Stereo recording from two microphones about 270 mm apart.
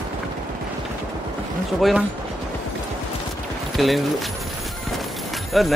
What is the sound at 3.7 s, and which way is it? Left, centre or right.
Speech, centre.